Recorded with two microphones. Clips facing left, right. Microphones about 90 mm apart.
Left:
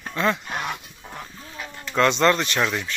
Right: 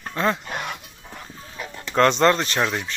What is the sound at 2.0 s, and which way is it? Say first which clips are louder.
Speech: right 2 dB; 40° right (ahead or behind).